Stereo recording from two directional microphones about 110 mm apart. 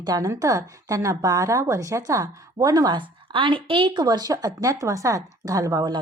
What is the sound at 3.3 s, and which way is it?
Speech, 50° right (ahead or behind).